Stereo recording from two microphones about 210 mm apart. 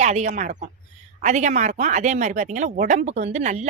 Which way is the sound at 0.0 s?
35° right (ahead or behind).